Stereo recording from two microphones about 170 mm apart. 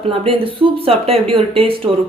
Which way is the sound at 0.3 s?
30° right (ahead or behind).